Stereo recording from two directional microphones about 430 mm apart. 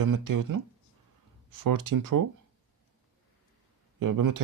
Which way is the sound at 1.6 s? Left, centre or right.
Right.